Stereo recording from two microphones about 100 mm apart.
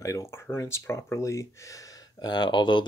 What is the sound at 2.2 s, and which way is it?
Speech, 45° left (ahead or behind).